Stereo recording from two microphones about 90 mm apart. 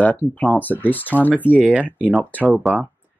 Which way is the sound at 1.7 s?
15° right (ahead or behind).